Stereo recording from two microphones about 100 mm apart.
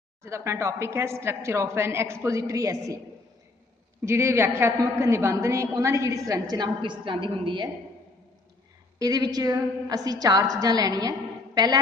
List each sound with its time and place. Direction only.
0.2 s a woman's voice: 30° right (ahead or behind)
4.0 s a woman's voice: 30° right (ahead or behind); by 7.7 s 50° right (ahead or behind)
8.9 s a woman's voice: 40° right (ahead or behind)